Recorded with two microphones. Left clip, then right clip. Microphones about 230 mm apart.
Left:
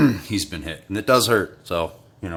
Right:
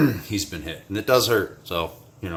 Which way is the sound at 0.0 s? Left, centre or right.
Left.